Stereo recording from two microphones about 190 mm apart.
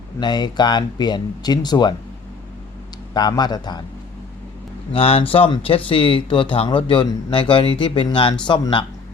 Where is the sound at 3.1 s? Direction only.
20° left (ahead or behind).